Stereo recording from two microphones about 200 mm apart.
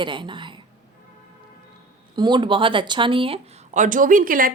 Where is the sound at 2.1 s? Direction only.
20° right (ahead or behind).